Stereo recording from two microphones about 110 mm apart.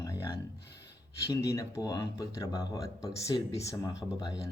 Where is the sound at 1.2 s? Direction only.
25° left (ahead or behind).